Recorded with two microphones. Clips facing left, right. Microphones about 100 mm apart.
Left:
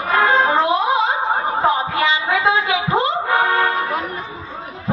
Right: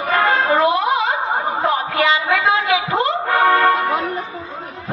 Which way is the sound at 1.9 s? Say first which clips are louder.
Right 1 dB; 60° right (ahead or behind).